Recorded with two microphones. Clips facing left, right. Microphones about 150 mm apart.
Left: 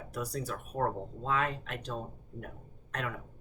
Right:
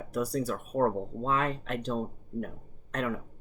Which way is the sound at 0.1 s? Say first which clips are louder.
Right 7 dB; 30° right (ahead or behind).